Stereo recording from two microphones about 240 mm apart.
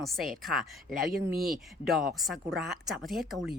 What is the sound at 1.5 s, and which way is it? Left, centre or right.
Speech, centre.